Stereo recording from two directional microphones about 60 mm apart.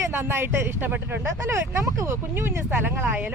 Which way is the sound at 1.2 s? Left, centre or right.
Right.